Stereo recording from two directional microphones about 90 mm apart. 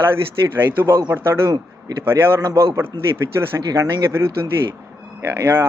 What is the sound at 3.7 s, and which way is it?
Speech, 45° right (ahead or behind).